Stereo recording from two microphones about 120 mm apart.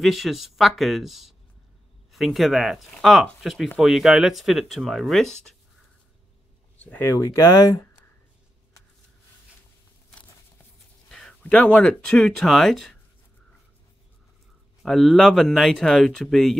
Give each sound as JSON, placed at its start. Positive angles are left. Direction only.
{"t": 0.0, "sound": "speech", "side_deg": 0}
{"t": 6.8, "sound": "speech", "side_deg": 15}
{"t": 11.1, "sound": "speech", "side_deg": 5}
{"t": 14.8, "sound": "speech", "side_deg": 0}